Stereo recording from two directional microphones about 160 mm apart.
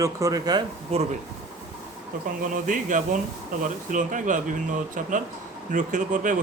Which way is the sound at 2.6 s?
55° right (ahead or behind).